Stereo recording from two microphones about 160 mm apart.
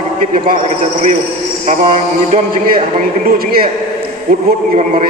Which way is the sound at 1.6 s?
45° right (ahead or behind).